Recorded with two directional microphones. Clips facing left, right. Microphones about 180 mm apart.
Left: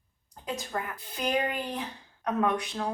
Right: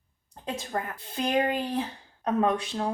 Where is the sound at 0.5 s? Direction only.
30° right (ahead or behind).